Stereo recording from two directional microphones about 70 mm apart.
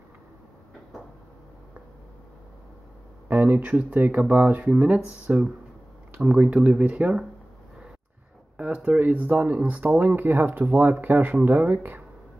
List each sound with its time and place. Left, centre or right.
3.3 s speech: right
8.5 s speech: centre